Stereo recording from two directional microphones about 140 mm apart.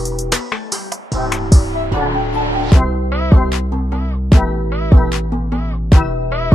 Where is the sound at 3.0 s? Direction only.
20° left (ahead or behind).